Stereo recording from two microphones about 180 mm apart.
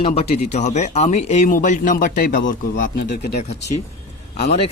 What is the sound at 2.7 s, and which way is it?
Speech, 90° left.